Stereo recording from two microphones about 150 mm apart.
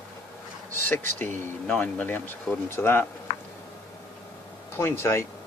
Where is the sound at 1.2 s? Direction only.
10° left (ahead or behind).